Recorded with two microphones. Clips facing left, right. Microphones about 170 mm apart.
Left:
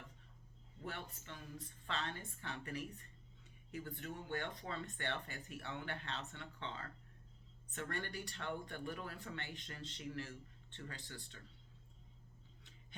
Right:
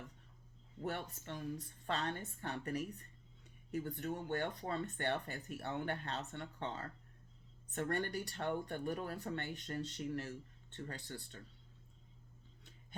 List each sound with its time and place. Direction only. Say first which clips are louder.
0.8 s a woman's voice: right 6 dB; 45° right (ahead or behind)